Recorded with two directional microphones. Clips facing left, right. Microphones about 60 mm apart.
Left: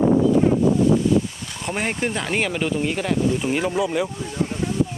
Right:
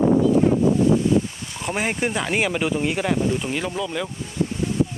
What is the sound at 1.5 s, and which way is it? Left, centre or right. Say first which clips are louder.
Speech: right 1 dB; centre.